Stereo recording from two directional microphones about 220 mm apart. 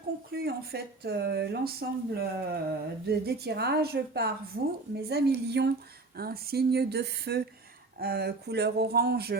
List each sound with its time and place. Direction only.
0.3 s a woman's voice: 45° right (ahead or behind)